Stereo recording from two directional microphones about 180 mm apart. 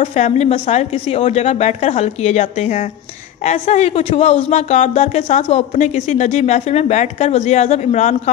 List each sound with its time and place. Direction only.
0.0 s speech: 40° left (ahead or behind)